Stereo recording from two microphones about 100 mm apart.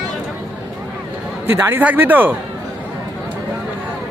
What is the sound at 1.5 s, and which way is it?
Speech, 25° right (ahead or behind).